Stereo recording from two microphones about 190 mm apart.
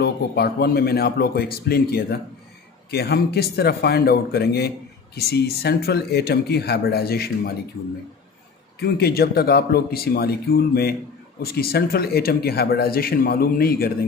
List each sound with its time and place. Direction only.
0.0 s speech: 60° left (ahead or behind)
8.7 s speech: 55° left (ahead or behind)